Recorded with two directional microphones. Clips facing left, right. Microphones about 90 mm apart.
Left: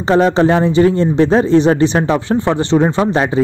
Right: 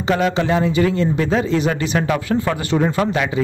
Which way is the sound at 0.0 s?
35° left (ahead or behind).